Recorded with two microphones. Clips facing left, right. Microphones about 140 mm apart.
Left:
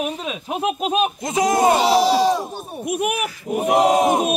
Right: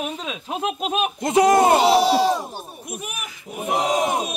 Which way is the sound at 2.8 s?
70° left (ahead or behind).